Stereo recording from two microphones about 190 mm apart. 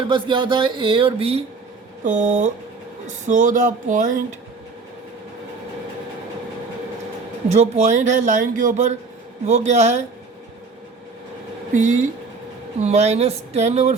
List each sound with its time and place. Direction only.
0.1 s speech: 25° right (ahead or behind)
2.0 s speech: 40° right (ahead or behind)
7.5 s speech: 35° right (ahead or behind)
11.7 s speech: 40° right (ahead or behind)